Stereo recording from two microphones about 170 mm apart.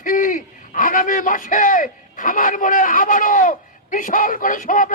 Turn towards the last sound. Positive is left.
turn(degrees=50)  # may be behind; listen again after turning